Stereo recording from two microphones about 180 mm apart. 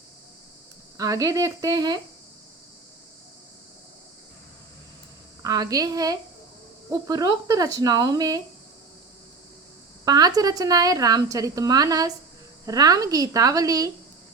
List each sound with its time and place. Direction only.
0.9 s a woman's voice: 20° right (ahead or behind)
5.4 s a woman's voice: 20° right (ahead or behind)
10.1 s a woman's voice: 20° right (ahead or behind)